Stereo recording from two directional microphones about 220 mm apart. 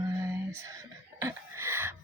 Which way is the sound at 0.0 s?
15° right (ahead or behind).